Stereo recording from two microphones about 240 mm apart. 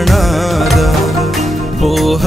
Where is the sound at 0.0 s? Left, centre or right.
Centre.